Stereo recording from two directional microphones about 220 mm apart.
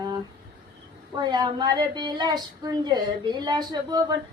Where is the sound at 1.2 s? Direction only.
20° right (ahead or behind).